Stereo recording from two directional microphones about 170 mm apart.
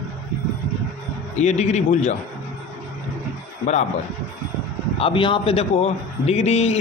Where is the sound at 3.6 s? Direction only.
40° left (ahead or behind).